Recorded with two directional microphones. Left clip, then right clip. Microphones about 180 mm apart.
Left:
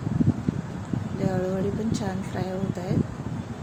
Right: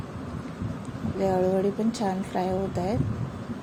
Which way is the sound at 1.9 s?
15° right (ahead or behind).